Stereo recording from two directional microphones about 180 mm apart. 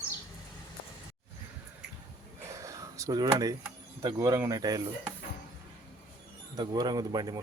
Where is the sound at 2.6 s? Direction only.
15° right (ahead or behind).